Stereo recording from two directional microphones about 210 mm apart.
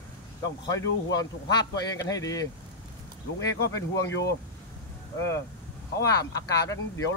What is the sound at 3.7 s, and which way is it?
Speech, 15° left (ahead or behind).